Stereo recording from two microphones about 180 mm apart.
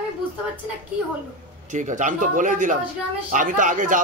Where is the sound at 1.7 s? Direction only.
45° right (ahead or behind).